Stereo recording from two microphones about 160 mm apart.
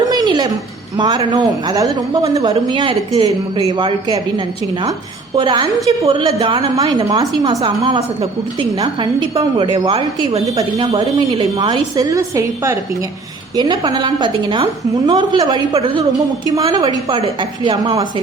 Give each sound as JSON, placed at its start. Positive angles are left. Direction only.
{"t": 0.1, "sound": "a sound", "side_deg": -25}
{"t": 0.9, "sound": "a woman's voice", "side_deg": -25}
{"t": 5.4, "sound": "a woman's voice", "side_deg": -30}
{"t": 10.4, "sound": "a woman's voice", "side_deg": -25}